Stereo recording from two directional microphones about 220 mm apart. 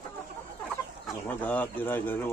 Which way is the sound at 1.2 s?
5° left (ahead or behind).